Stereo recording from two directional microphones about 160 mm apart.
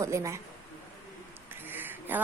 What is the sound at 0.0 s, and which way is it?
Speech, 20° right (ahead or behind).